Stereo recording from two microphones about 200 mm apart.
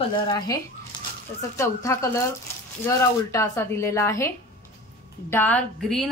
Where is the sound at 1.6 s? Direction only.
15° left (ahead or behind).